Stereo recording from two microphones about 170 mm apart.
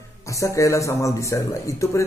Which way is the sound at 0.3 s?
20° left (ahead or behind).